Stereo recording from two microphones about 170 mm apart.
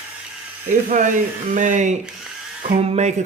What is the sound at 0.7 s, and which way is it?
A man's voice, 50° right (ahead or behind).